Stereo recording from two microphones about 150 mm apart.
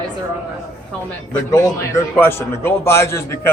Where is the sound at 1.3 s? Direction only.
20° left (ahead or behind).